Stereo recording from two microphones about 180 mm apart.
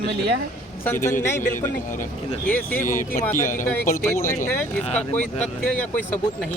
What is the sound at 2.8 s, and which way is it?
Speech, 45° left (ahead or behind).